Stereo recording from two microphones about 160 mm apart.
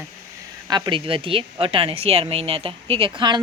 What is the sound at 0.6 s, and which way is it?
A woman's voice, 25° right (ahead or behind).